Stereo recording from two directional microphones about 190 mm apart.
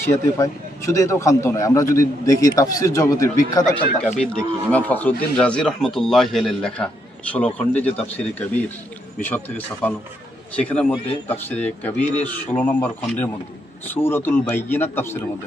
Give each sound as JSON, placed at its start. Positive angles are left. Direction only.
{"t": 0.1, "sound": "a man's voice", "side_deg": 15}
{"t": 4.2, "sound": "a man's voice", "side_deg": 5}